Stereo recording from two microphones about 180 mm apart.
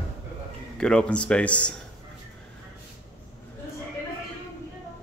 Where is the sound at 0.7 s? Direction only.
5° left (ahead or behind).